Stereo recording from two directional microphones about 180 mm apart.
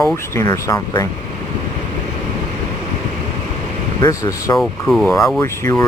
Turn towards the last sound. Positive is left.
turn(degrees=15)  # may be behind; listen again after turning